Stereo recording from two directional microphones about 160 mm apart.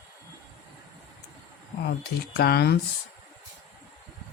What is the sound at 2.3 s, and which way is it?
Speech, 80° left.